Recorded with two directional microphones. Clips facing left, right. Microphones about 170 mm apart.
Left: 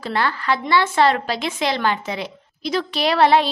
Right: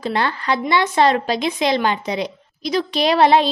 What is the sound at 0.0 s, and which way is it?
A woman's voice, 20° right (ahead or behind).